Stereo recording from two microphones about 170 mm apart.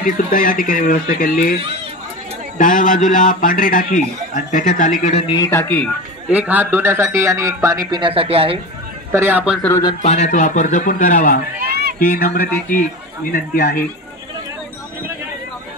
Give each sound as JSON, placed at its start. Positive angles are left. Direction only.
{"t": 0.0, "sound": "a man's voice", "side_deg": 55}
{"t": 2.6, "sound": "a man's voice", "side_deg": 50}
{"t": 5.5, "sound": "speech", "side_deg": 10}
{"t": 6.3, "sound": "speech", "side_deg": -10}
{"t": 9.1, "sound": "speech", "side_deg": -15}
{"t": 9.6, "sound": "speech", "side_deg": 15}
{"t": 10.0, "sound": "a man's voice", "side_deg": 40}
{"t": 11.6, "sound": "a sound", "side_deg": -65}
{"t": 12.0, "sound": "a man's voice", "side_deg": 55}